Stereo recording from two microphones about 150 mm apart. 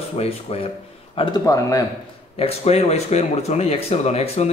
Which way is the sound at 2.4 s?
45° left (ahead or behind).